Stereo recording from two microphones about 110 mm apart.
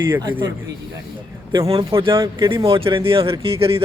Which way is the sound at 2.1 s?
35° right (ahead or behind).